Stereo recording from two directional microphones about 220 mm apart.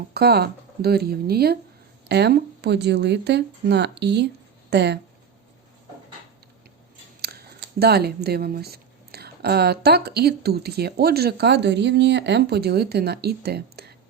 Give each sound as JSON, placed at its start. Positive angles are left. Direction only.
{"t": 0.1, "sound": "speech", "side_deg": -45}
{"t": 7.2, "sound": "speech", "side_deg": -45}